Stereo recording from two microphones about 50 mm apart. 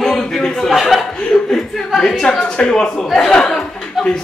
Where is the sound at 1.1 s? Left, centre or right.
Centre.